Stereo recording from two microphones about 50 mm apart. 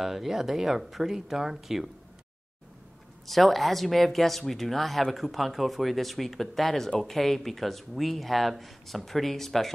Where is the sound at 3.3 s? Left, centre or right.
Centre.